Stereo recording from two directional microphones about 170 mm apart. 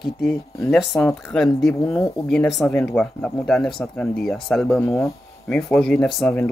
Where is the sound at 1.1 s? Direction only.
Centre (ahead or behind).